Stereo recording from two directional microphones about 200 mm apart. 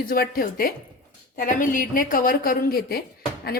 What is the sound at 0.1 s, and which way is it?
Speech, 45° left (ahead or behind).